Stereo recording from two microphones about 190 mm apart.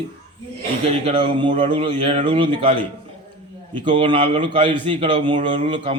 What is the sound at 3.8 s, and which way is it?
A man's voice, 25° right (ahead or behind).